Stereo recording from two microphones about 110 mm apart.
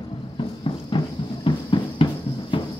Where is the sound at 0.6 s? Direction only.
50° left (ahead or behind).